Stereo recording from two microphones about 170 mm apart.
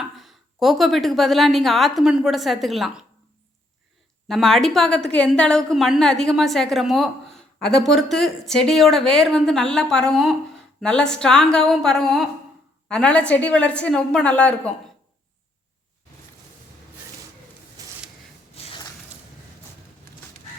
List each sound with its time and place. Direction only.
0.0 s a woman's voice: centre (ahead or behind)
4.3 s a woman's voice: centre (ahead or behind)
18.5 s a sound: 35° left (ahead or behind)